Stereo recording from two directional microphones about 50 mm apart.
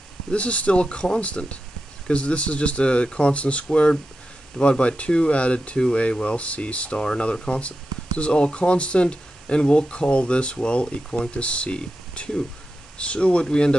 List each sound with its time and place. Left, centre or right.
0.3 s speech: left